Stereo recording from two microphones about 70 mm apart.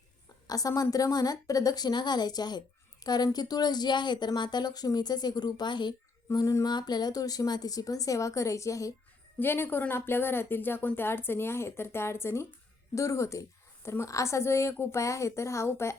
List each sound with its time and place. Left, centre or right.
0.4 s a woman's voice: left
6.3 s a woman's voice: left
6.7 s a woman's voice: left
9.4 s a woman's voice: left